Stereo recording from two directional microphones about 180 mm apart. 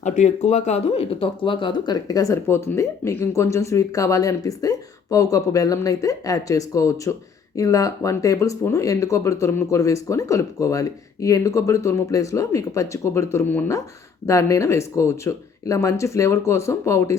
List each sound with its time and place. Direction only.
0.0 s speech: 40° left (ahead or behind); by 17.2 s 15° left (ahead or behind)